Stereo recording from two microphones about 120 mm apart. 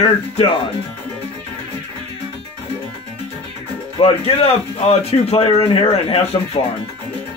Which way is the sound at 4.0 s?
55° left (ahead or behind).